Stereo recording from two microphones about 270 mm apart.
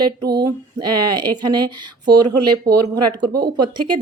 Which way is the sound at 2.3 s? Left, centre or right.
Right.